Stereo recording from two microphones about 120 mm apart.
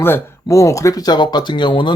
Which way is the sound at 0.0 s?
20° left (ahead or behind).